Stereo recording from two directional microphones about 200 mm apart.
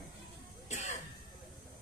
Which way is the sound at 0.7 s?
35° left (ahead or behind).